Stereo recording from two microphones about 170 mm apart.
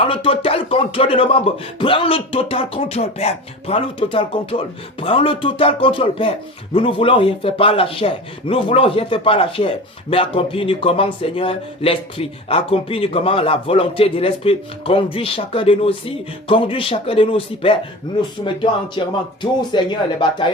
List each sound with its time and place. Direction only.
0.0 s a man's voice: 30° left (ahead or behind)